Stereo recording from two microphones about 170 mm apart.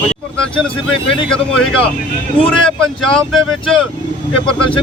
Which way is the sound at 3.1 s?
5° left (ahead or behind).